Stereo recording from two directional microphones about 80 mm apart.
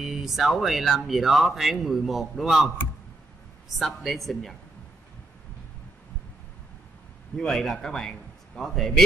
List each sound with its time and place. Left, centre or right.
0.0 s speech: centre
7.3 s speech: centre